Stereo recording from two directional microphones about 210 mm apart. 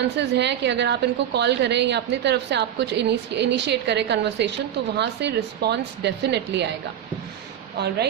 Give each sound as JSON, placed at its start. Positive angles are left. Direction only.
{"t": 0.2, "sound": "a woman's voice", "side_deg": -55}